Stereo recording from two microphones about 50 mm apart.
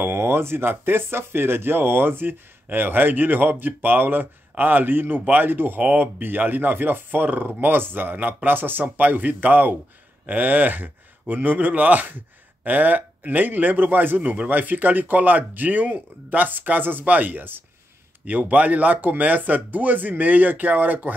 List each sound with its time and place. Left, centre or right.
0.0 s speech: right
5.2 s speech: right
5.5 s speech: right
5.8 s speech: right
18.5 s speech: right